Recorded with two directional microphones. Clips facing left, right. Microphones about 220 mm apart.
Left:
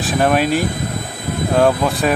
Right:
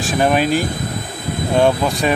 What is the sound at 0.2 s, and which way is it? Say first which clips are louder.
Speech: even; centre (ahead or behind).